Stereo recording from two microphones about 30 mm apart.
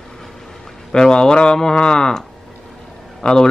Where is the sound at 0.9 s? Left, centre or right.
Left.